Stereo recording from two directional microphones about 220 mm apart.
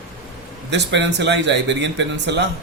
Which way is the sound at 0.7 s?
55° right (ahead or behind).